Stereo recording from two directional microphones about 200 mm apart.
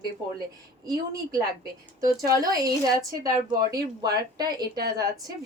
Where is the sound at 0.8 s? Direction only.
20° right (ahead or behind).